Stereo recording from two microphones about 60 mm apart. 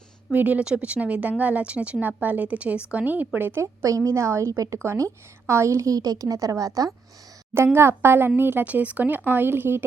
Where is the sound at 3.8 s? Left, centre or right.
Right.